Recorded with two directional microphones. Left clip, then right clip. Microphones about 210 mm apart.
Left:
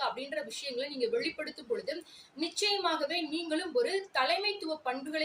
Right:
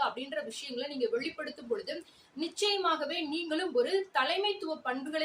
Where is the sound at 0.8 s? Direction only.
15° right (ahead or behind).